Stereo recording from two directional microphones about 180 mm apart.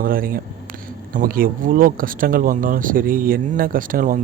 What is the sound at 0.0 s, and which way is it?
Speech, 50° right (ahead or behind).